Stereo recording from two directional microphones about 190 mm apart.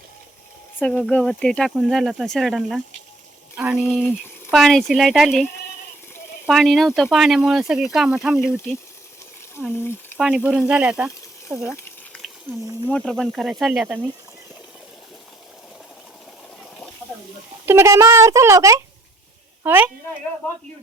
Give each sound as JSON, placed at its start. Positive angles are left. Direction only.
{"t": 0.8, "sound": "a child's voice", "side_deg": 5}
{"t": 9.7, "sound": "speech", "side_deg": 10}
{"t": 10.2, "sound": "a child's voice", "side_deg": -5}
{"t": 11.7, "sound": "a sound", "side_deg": 15}
{"t": 12.5, "sound": "a child's voice", "side_deg": -15}
{"t": 13.1, "sound": "speech", "side_deg": 0}
{"t": 17.7, "sound": "a child's voice", "side_deg": -15}